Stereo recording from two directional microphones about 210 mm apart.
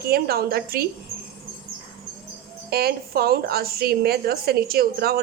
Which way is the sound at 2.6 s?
50° right (ahead or behind).